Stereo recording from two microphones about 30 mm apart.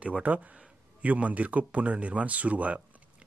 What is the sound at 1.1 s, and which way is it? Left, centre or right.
Speech, right.